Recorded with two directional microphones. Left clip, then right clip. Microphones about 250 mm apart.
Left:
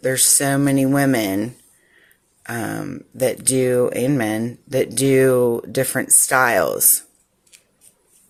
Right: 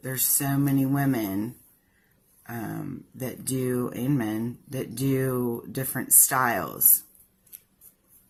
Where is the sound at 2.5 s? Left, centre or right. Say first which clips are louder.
Left 9 dB; left.